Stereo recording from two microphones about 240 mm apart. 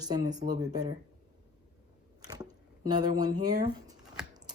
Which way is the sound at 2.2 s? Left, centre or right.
Centre.